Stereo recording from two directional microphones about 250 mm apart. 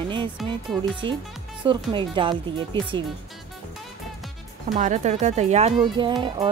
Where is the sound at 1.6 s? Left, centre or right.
Centre.